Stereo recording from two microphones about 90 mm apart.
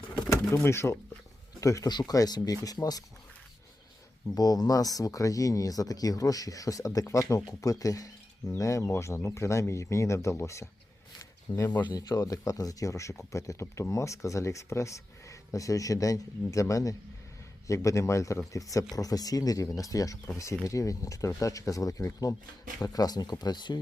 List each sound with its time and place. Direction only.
0.2 s bird: 35° left (ahead or behind)
0.6 s speech: 30° left (ahead or behind)
1.9 s speech: 55° left (ahead or behind)
4.4 s speech: 45° left (ahead or behind)
11.2 s a sound: 35° left (ahead or behind)
11.9 s speech: 45° left (ahead or behind)